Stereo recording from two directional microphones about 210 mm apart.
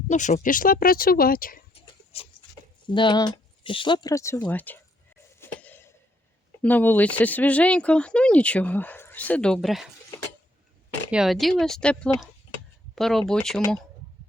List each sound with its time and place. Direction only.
0.1 s speech: 35° left (ahead or behind)
2.1 s a sound: 30° left (ahead or behind)
2.8 s speech: 20° left (ahead or behind)
5.4 s a sound: 10° left (ahead or behind)
6.6 s speech: 10° left (ahead or behind)
11.1 s speech: centre (ahead or behind)